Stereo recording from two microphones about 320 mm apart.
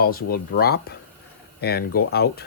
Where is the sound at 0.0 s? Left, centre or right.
Left.